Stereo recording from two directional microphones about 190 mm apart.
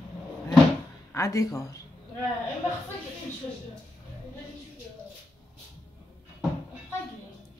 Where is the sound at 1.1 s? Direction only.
15° left (ahead or behind).